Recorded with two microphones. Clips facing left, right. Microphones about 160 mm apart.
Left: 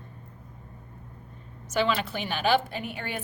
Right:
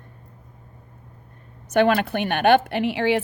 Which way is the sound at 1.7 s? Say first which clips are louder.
Right 8 dB; 60° right (ahead or behind).